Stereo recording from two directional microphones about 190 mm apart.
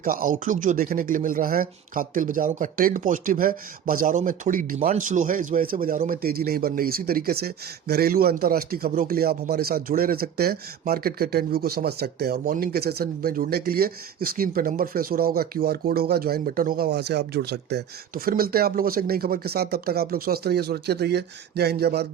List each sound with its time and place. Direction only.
0.0 s speech: 45° right (ahead or behind)